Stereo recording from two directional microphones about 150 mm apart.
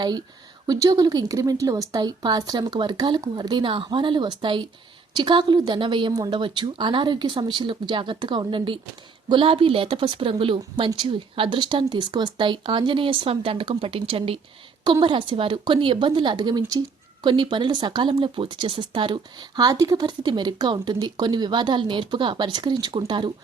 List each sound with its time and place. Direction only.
0.7 s speech: 25° right (ahead or behind)